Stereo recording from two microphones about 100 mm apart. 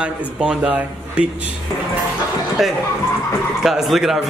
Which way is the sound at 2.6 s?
Centre (ahead or behind).